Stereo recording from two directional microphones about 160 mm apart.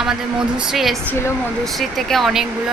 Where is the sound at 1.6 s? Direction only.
Centre (ahead or behind).